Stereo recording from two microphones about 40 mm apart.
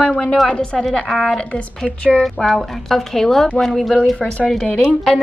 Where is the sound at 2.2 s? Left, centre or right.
Centre.